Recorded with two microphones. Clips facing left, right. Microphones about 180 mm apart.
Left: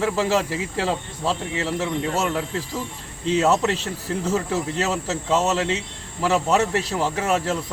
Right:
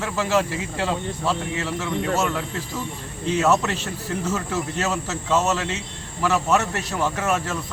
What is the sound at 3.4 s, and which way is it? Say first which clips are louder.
Speech: even; 30° left (ahead or behind).